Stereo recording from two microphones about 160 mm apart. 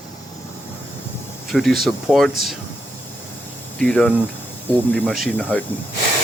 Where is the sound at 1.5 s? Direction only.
Centre (ahead or behind).